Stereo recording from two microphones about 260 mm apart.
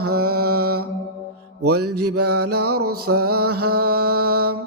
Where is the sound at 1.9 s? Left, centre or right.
Right.